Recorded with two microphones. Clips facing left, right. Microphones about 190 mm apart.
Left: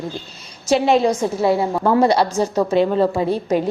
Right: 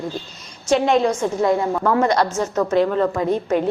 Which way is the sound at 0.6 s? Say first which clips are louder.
Left 1 dB; 10° left (ahead or behind).